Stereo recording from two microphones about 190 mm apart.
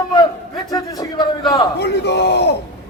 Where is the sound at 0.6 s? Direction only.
20° left (ahead or behind).